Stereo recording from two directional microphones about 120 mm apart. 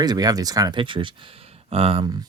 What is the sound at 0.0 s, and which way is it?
Speech, 35° right (ahead or behind).